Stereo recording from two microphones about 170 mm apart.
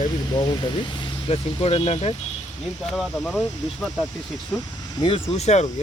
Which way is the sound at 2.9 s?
Centre (ahead or behind).